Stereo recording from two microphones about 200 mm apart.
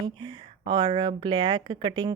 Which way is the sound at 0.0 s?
25° right (ahead or behind).